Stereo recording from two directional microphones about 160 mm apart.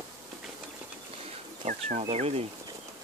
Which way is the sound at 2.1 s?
40° right (ahead or behind).